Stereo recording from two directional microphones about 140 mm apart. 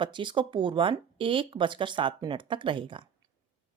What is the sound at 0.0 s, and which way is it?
Speech, 35° right (ahead or behind).